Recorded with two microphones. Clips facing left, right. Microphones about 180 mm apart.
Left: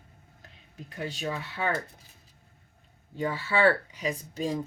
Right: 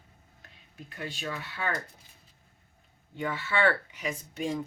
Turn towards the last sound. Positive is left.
turn(degrees=35)  # may be behind; listen again after turning